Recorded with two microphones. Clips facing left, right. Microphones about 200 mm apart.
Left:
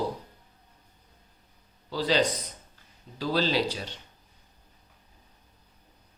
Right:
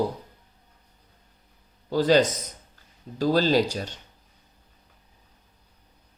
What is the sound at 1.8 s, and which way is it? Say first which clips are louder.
Speech: right 6 dB; 50° right (ahead or behind).